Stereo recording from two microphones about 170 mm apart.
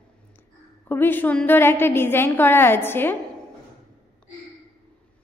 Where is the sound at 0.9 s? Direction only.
10° left (ahead or behind).